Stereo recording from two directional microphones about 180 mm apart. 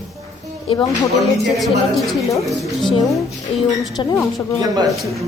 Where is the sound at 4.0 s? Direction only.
25° left (ahead or behind).